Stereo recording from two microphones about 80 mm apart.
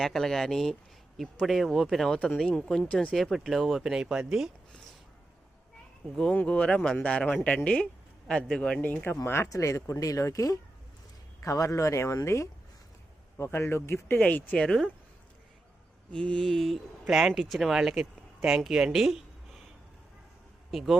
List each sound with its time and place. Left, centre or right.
0.0 s speech: centre
2.1 s speech: centre
3.2 s speech: centre
6.1 s speech: centre
8.8 s speech: left
9.2 s speech: left
14.2 s speech: centre
16.1 s speech: centre
17.1 s speech: centre
20.7 s speech: centre